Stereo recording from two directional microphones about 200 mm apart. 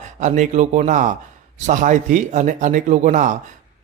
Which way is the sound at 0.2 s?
35° right (ahead or behind).